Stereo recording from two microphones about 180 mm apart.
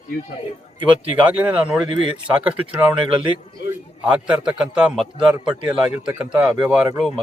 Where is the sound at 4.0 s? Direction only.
5° right (ahead or behind).